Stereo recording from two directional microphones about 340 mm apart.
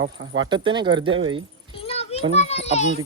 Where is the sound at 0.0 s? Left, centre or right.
Right.